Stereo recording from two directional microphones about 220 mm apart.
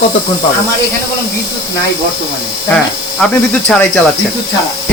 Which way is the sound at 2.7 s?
5° left (ahead or behind).